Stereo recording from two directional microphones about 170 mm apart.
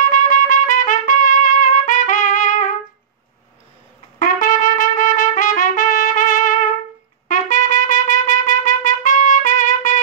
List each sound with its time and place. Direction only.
0.1 s trumpet: 50° left (ahead or behind)
4.2 s trumpet: 50° left (ahead or behind)